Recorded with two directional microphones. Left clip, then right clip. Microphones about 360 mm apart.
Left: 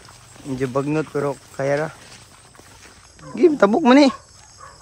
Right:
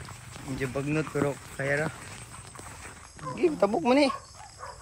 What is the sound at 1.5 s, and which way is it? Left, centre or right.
Speech, left.